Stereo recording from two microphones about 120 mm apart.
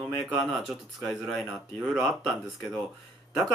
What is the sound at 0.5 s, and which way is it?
Speech, centre (ahead or behind).